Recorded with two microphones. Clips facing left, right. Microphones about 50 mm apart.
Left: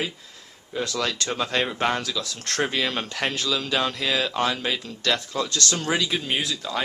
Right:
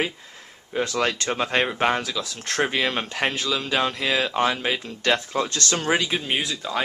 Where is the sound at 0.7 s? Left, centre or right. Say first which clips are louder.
Right 3 dB; right.